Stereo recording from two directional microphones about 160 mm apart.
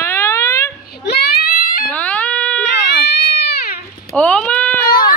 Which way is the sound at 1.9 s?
10° left (ahead or behind).